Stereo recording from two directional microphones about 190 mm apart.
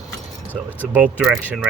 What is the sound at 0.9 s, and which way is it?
Speech, 10° right (ahead or behind).